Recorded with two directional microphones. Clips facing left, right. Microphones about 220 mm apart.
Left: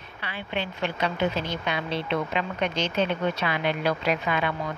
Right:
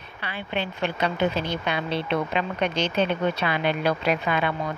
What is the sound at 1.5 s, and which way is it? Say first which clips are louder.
Speech: right 2 dB; 60° right (ahead or behind).